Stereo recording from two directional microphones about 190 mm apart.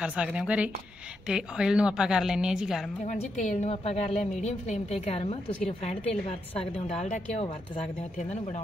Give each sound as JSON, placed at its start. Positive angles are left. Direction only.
{"t": 0.0, "sound": "a woman's voice", "side_deg": -5}
{"t": 3.1, "sound": "speech", "side_deg": 35}